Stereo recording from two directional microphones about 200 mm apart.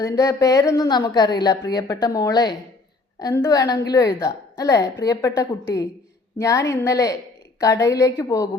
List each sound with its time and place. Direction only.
0.0 s a woman's voice: 15° left (ahead or behind)